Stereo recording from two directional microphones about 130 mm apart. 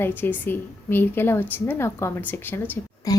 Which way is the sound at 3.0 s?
30° left (ahead or behind).